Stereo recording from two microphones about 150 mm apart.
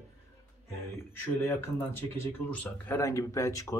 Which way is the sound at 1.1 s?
15° left (ahead or behind).